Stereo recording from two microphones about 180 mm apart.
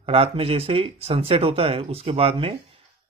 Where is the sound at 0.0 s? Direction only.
30° right (ahead or behind).